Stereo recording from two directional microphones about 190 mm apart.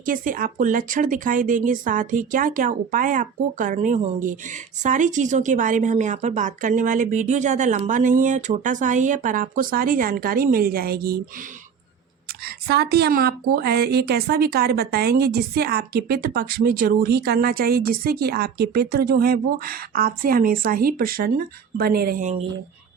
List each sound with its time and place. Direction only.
0.0 s speech: 45° right (ahead or behind)
12.5 s speech: 55° right (ahead or behind); by 22.4 s 40° right (ahead or behind)